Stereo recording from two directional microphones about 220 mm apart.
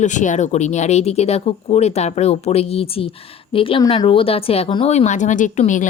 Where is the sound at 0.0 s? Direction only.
35° left (ahead or behind).